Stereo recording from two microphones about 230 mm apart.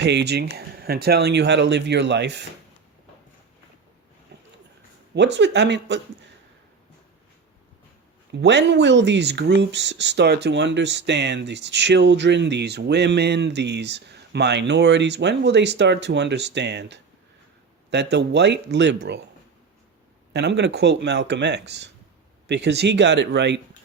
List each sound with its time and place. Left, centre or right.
0.0 s speech: right
4.3 s a sound: right
5.1 s speech: right
8.3 s speech: right
20.3 s speech: right